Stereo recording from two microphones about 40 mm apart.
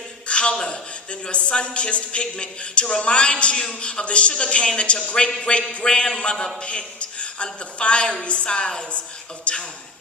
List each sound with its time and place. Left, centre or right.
0.3 s a man's voice: left